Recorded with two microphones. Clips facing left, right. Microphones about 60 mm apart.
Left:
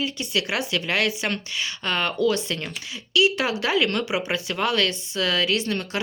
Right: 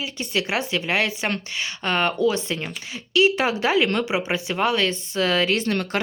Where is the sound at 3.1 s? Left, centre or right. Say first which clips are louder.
Right 2 dB; right.